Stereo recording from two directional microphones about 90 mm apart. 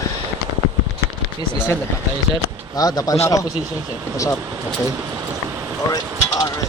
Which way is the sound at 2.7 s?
45° left (ahead or behind).